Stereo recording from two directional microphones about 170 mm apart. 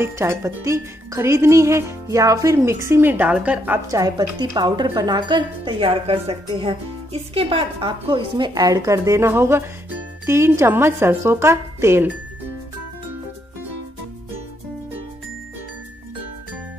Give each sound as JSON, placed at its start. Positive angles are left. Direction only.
{"t": 0.0, "sound": "speech", "side_deg": -15}